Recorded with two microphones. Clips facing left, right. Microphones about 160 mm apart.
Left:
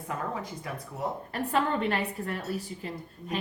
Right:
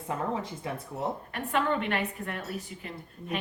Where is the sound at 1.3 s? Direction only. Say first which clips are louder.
Left 2 dB; 35° left (ahead or behind).